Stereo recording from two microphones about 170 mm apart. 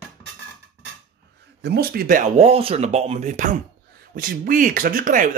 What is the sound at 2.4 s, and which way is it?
Speech, 35° right (ahead or behind).